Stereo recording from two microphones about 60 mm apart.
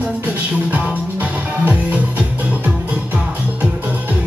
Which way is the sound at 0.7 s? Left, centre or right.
Right.